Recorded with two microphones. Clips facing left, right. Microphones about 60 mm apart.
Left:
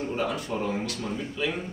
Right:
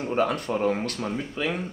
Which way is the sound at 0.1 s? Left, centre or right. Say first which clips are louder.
Right 8 dB; right.